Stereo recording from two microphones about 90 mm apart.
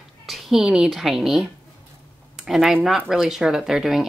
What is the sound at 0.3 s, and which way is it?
A woman's voice, 5° right (ahead or behind).